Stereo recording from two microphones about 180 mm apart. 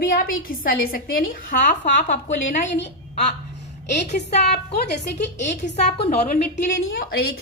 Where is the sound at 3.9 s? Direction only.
40° left (ahead or behind).